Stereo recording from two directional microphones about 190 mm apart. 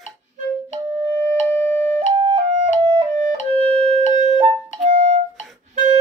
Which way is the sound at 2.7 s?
30° right (ahead or behind).